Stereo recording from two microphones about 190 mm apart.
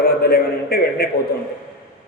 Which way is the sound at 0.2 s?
55° left (ahead or behind).